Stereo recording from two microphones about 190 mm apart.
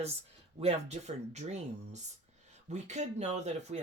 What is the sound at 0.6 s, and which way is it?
Speech, 35° right (ahead or behind).